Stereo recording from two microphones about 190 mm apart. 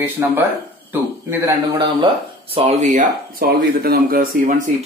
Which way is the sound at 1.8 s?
30° right (ahead or behind).